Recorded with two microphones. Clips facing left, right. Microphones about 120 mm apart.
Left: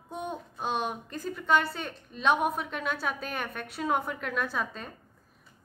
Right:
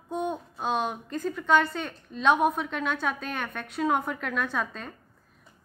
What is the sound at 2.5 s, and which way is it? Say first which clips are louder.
Speech: right 3 dB; 40° left (ahead or behind).